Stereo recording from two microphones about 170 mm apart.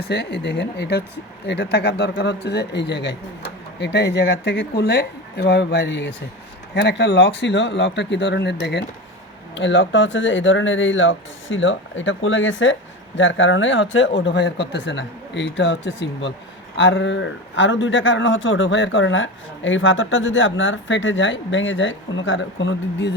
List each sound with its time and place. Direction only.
0.0 s speech: 80° left